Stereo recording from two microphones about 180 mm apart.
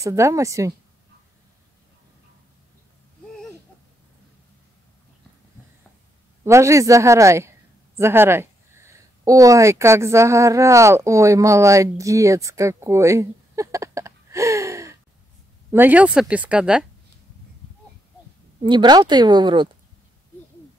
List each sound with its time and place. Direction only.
0.0 s speech: 15° right (ahead or behind)
6.4 s a woman's voice: 15° right (ahead or behind)
18.6 s speech: 25° right (ahead or behind)